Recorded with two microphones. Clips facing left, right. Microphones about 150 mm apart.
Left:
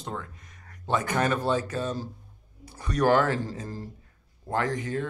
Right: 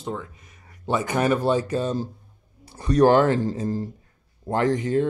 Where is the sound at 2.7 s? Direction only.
30° right (ahead or behind).